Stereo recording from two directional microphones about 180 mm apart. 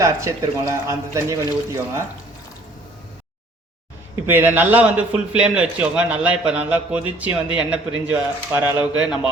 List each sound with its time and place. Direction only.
0.0 s a man's voice: 15° right (ahead or behind)
4.1 s a man's voice: 10° right (ahead or behind)